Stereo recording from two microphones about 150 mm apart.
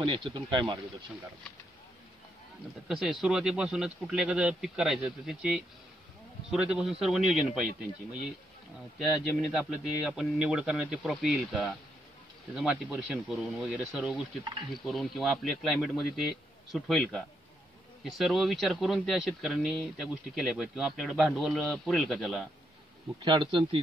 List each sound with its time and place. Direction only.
0.0 s speech: 30° right (ahead or behind)
2.9 s speech: centre (ahead or behind)
8.9 s speech: centre (ahead or behind)
23.2 s speech: 35° right (ahead or behind)